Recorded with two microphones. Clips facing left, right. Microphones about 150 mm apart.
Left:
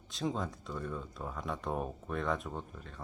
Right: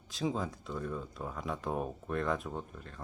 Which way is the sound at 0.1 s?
Centre (ahead or behind).